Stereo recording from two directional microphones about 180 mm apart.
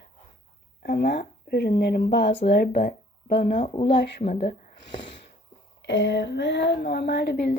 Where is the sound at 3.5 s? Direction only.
35° left (ahead or behind).